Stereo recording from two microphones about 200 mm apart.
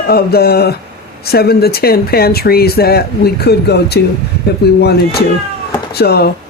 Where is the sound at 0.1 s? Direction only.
50° left (ahead or behind).